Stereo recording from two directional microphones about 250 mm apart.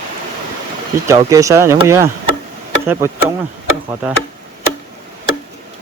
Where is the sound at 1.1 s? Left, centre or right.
Centre.